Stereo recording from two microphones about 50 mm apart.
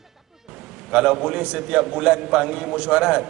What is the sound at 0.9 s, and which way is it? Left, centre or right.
Speech, centre.